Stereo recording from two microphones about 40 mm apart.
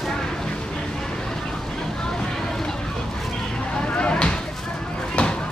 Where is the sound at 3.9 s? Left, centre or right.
Left.